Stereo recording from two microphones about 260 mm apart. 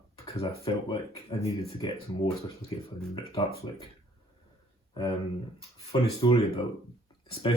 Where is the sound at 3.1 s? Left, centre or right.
Left.